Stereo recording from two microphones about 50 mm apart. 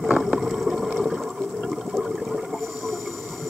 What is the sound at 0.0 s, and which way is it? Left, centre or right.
Boat, centre.